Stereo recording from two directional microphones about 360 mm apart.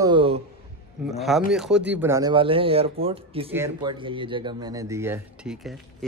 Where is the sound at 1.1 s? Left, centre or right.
Centre.